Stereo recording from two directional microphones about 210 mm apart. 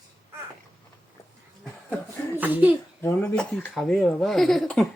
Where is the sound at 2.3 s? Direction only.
10° right (ahead or behind).